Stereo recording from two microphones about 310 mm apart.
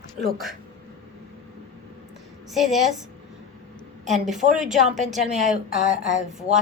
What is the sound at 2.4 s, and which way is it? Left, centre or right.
Speech, centre.